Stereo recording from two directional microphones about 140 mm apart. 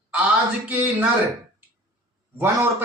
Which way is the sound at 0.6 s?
10° right (ahead or behind).